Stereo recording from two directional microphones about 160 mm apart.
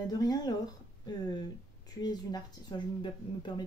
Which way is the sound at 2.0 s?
25° left (ahead or behind).